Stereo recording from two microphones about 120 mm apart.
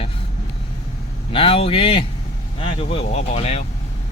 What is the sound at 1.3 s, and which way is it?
Speech, 50° left (ahead or behind).